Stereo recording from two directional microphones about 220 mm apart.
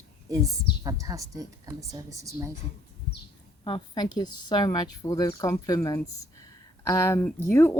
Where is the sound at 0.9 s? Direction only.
15° right (ahead or behind).